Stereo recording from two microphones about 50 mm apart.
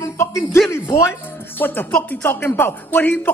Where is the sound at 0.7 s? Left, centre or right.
Left.